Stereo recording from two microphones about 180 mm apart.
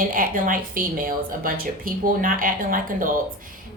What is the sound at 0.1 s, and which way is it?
A woman's voice, 50° right (ahead or behind).